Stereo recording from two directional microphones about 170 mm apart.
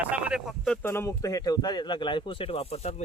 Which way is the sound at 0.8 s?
15° left (ahead or behind).